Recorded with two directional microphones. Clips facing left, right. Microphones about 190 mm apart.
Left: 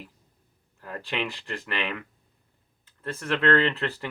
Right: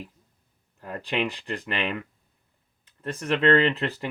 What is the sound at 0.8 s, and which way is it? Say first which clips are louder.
Speech: right 3 dB; 15° right (ahead or behind).